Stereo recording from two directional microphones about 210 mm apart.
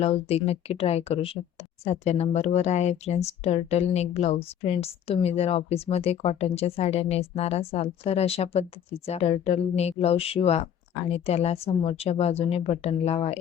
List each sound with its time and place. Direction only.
0.0 s speech: 30° left (ahead or behind)